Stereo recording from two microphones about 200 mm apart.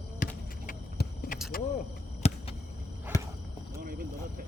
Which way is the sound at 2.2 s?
30° left (ahead or behind).